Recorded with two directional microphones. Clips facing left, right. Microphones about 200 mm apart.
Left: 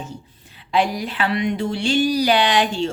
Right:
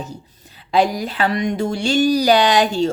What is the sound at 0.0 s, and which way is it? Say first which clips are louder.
Speech: right 2 dB; 40° right (ahead or behind).